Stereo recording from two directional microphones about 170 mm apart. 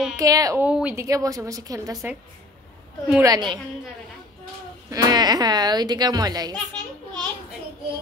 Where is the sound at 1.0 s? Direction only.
20° right (ahead or behind).